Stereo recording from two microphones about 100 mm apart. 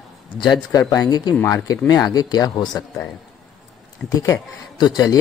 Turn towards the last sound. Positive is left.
turn(degrees=45)  # may be behind; listen again after turning